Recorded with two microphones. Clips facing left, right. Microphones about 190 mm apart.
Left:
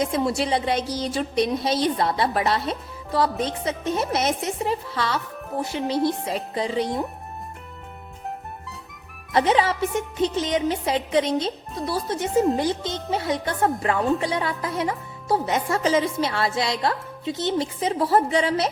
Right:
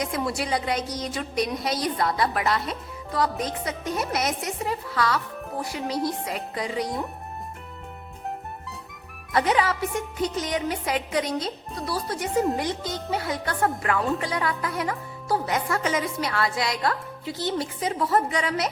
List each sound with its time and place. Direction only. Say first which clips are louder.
0.0 s speech: left 5 dB; 25° left (ahead or behind)
9.3 s speech: left 3 dB; 25° left (ahead or behind)